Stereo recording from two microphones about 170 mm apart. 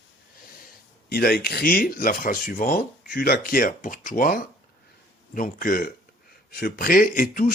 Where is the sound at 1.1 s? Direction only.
65° left (ahead or behind).